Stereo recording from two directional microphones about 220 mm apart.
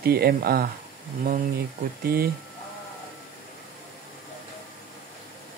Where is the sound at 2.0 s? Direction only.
45° right (ahead or behind).